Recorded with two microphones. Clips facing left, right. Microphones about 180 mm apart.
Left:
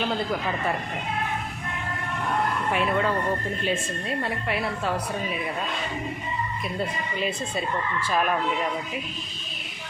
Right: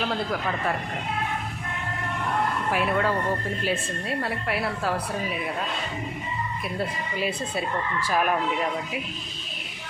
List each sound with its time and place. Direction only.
0.0 s a woman's voice: 5° left (ahead or behind)
2.7 s a woman's voice: 5° right (ahead or behind)
4.2 s a woman's voice: 5° right (ahead or behind)
6.7 s speech: 5° right (ahead or behind)